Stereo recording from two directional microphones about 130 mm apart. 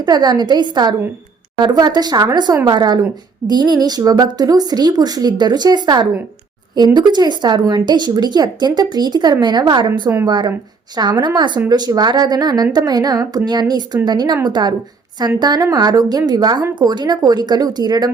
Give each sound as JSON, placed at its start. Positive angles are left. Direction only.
{"t": 0.0, "sound": "a woman's voice", "side_deg": -30}